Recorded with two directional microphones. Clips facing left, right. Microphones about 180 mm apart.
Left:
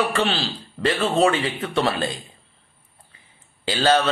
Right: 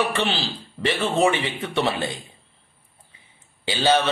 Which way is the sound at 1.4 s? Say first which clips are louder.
Left 1 dB; 20° right (ahead or behind).